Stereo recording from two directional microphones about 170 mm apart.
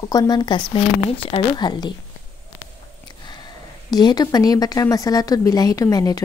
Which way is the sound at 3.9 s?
25° left (ahead or behind).